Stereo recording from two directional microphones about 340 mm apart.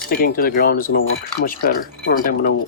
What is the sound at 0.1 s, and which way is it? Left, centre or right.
Speech, left.